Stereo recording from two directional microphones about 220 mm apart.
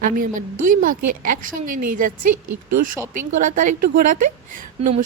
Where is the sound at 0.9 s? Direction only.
40° right (ahead or behind).